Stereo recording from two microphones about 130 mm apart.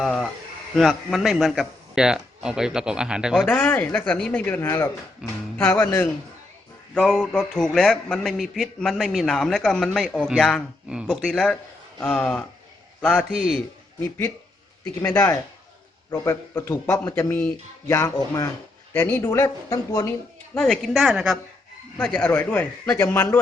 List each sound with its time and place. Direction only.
0.0 s a man's voice: centre (ahead or behind)
3.5 s speech: 10° left (ahead or behind)
5.2 s music: 5° right (ahead or behind)
5.5 s speech: 15° left (ahead or behind)
6.9 s a man's voice: 5° left (ahead or behind)
13.3 s a man's voice: 5° right (ahead or behind)
14.0 s speech: 20° left (ahead or behind)
20.6 s a man's voice: centre (ahead or behind)
21.9 s speech: 10° left (ahead or behind)